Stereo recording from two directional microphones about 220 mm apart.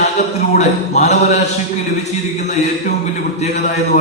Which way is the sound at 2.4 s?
30° left (ahead or behind).